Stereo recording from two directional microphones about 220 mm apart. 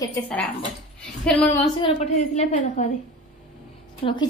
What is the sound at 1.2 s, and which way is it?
Speech, 5° left (ahead or behind).